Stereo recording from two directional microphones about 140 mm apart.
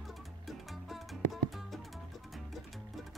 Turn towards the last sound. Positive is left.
turn(degrees=0)  # may be behind; listen again after turning